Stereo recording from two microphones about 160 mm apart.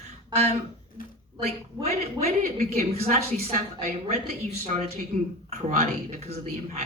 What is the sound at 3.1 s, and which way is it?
Speech, 55° right (ahead or behind).